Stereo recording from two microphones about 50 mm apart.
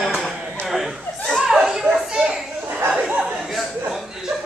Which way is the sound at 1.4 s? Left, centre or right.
Centre.